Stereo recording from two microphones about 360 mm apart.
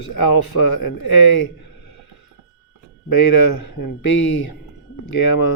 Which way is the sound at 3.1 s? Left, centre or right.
Left.